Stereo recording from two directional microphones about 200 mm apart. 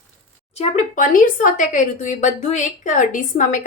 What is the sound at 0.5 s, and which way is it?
Speech, 35° left (ahead or behind).